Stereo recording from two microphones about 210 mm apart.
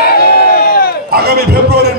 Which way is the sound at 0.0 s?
50° left (ahead or behind).